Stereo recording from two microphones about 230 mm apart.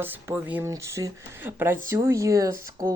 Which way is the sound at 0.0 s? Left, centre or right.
Centre.